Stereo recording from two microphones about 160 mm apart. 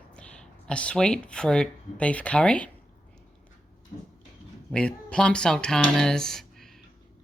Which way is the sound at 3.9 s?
30° left (ahead or behind).